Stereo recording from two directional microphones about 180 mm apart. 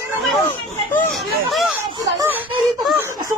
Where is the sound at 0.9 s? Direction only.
Centre (ahead or behind).